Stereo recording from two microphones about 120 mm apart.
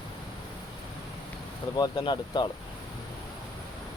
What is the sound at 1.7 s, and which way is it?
Speech, 35° left (ahead or behind).